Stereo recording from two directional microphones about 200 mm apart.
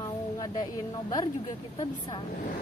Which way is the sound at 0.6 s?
20° left (ahead or behind).